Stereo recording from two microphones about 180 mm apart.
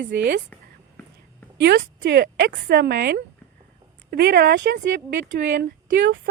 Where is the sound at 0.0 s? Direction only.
70° right (ahead or behind).